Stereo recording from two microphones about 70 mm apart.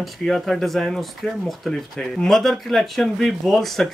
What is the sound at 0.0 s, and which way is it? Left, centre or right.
Speech, centre.